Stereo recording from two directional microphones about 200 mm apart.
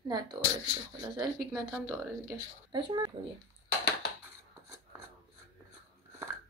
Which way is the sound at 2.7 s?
25° right (ahead or behind).